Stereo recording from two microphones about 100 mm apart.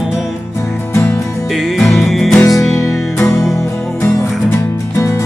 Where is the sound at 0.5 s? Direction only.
25° left (ahead or behind).